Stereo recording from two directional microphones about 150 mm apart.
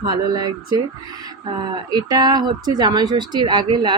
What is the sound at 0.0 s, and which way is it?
Speech, 30° right (ahead or behind).